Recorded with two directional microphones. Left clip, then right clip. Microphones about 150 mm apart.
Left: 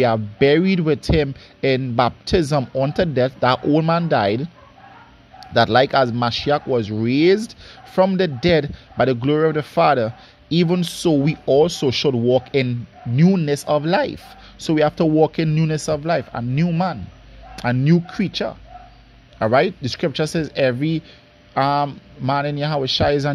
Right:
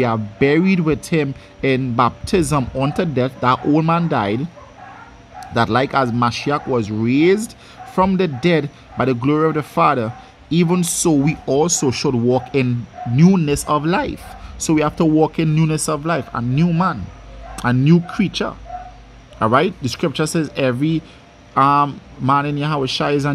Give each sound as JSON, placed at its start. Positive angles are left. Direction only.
{"t": 0.0, "sound": "speech", "side_deg": 25}